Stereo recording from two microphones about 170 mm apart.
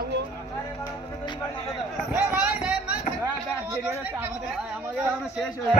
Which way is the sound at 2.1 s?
10° right (ahead or behind).